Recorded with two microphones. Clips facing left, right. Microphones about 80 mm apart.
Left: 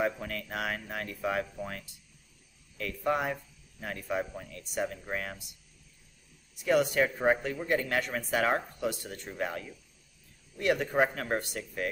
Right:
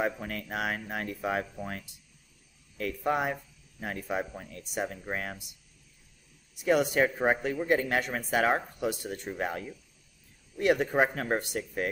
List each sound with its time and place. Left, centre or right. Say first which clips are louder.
0.0 s speech: even; right
6.6 s speech: right 1 dB; centre